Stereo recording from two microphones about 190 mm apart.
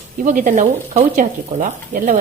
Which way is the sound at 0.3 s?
40° right (ahead or behind).